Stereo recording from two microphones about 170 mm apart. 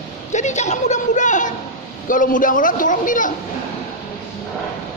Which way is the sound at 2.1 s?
50° left (ahead or behind).